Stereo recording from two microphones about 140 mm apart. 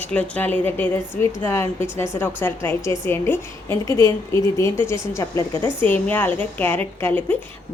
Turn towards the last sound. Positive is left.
turn(degrees=10)  # may be behind; listen again after turning